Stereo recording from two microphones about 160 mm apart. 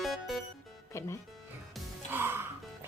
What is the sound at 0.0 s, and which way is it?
Music, centre (ahead or behind).